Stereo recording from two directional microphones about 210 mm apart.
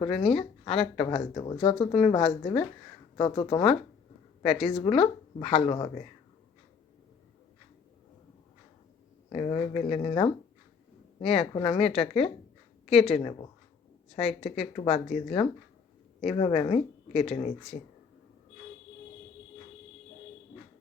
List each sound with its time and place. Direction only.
0.0 s speech: 30° left (ahead or behind)
4.8 s speech: 30° left (ahead or behind)
9.3 s speech: 30° left (ahead or behind)